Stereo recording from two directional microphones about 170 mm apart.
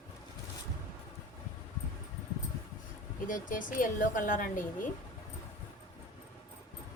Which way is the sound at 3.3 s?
50° left (ahead or behind).